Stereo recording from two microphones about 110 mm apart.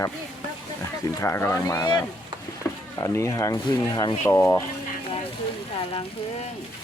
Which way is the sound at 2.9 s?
30° left (ahead or behind).